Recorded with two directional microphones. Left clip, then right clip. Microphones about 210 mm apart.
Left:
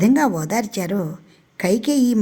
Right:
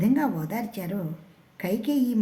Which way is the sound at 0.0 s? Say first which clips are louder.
Left 8 dB; 45° left (ahead or behind).